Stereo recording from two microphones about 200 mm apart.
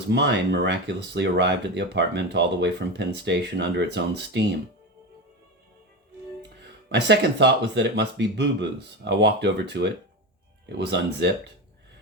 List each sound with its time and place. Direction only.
0.1 s speech: 60° right (ahead or behind)
6.8 s speech: 60° right (ahead or behind)